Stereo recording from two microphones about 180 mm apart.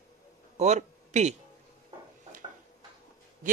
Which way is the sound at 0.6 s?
40° right (ahead or behind).